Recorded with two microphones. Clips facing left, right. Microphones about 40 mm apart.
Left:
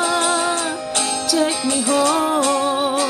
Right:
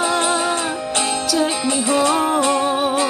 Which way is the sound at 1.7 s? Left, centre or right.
Right.